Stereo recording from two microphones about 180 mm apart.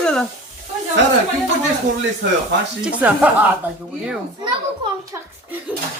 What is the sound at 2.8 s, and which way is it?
Speech, 10° right (ahead or behind).